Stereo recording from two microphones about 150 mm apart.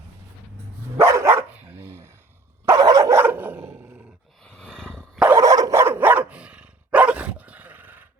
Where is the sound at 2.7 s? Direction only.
25° right (ahead or behind).